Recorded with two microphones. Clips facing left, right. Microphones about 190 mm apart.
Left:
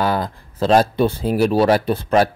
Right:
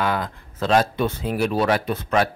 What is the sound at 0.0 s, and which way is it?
Speech, 35° left (ahead or behind).